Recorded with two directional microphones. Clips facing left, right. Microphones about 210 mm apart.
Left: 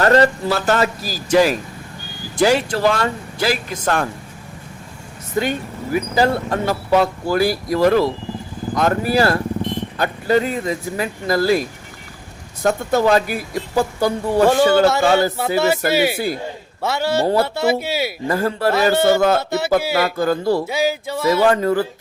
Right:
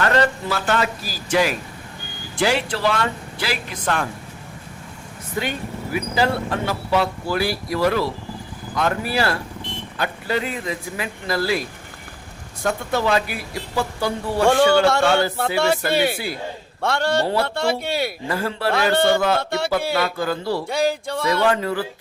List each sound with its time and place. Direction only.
0.0 s a man's voice: 35° left (ahead or behind)
5.4 s speech: 40° left (ahead or behind)
12.6 s speech: 40° left (ahead or behind)
14.4 s a sound: 5° left (ahead or behind)
18.3 s speech: 45° left (ahead or behind)
18.7 s a sound: 5° left (ahead or behind)
20.1 s speech: 45° left (ahead or behind)
20.7 s a sound: 5° left (ahead or behind)
21.4 s speech: 45° left (ahead or behind)